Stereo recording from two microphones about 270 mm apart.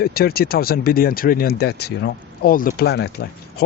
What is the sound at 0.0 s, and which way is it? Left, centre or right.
Speech, left.